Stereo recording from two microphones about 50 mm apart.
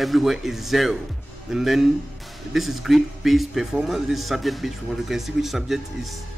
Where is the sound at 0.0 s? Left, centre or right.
Centre.